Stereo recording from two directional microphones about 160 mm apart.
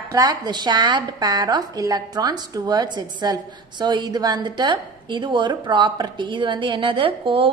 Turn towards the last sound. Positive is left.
turn(degrees=-35)  # may be behind; listen again after turning